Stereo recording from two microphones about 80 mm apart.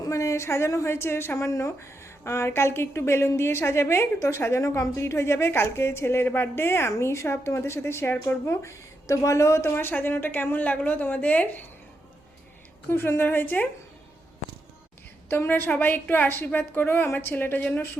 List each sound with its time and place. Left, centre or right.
0.0 s a woman's voice: left; by 11.6 s centre
12.9 s a woman's voice: left
15.3 s a woman's voice: left